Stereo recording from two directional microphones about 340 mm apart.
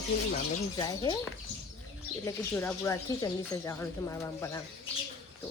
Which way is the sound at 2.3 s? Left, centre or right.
Centre.